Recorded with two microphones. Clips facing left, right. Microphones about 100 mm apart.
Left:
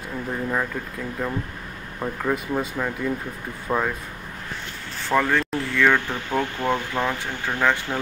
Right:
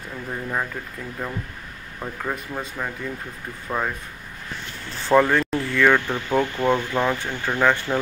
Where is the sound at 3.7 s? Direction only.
20° left (ahead or behind).